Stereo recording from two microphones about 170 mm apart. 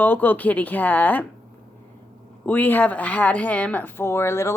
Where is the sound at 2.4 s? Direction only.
10° left (ahead or behind).